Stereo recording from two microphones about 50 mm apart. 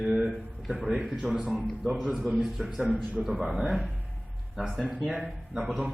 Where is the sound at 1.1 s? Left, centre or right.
Centre.